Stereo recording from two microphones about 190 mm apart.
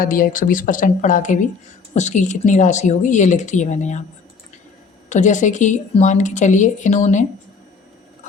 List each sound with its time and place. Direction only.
0.0 s a woman's voice: 45° left (ahead or behind)
5.0 s a woman's voice: 40° left (ahead or behind)